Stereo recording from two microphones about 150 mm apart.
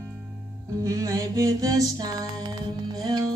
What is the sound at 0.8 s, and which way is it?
Music, 20° right (ahead or behind).